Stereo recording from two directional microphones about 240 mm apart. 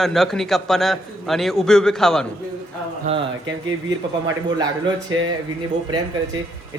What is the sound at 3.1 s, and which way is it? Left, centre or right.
Speech, right.